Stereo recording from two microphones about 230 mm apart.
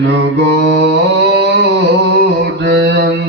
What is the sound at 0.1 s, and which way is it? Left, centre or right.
Mantra, right.